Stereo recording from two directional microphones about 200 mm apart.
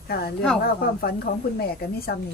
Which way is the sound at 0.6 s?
50° left (ahead or behind).